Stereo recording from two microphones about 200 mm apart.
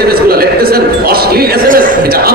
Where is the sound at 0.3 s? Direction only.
50° right (ahead or behind).